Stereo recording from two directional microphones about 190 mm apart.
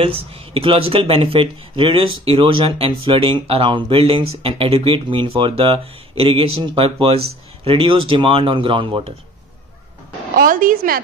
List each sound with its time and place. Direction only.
0.0 s speech: 30° right (ahead or behind)
10.4 s a woman's voice: 45° right (ahead or behind)